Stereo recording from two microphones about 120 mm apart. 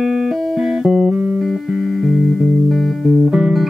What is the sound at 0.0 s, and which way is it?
Music, 5° right (ahead or behind).